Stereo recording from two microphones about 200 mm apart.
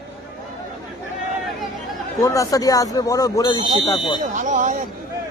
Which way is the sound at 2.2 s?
15° left (ahead or behind).